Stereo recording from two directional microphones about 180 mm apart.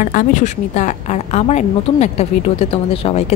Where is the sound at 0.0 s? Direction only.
50° left (ahead or behind).